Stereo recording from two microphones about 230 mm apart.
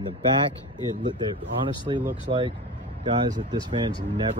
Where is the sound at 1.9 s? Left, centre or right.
Centre.